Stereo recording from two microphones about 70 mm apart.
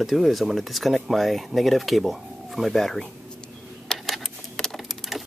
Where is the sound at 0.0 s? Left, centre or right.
Centre.